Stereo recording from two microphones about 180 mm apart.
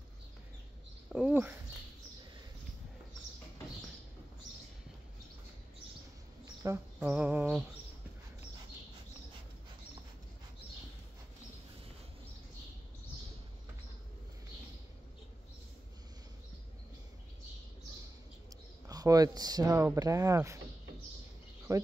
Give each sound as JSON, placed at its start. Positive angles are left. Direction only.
{"t": 1.1, "sound": "speech", "side_deg": -5}
{"t": 6.4, "sound": "a sound", "side_deg": -15}
{"t": 7.0, "sound": "music", "side_deg": -5}
{"t": 18.9, "sound": "speech", "side_deg": -20}
{"t": 21.7, "sound": "music", "side_deg": -15}